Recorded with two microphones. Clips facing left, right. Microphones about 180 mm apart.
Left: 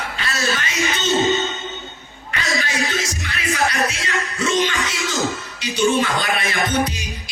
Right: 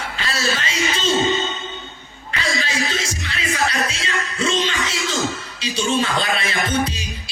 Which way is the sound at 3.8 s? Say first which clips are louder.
Left 2 dB; 25° right (ahead or behind).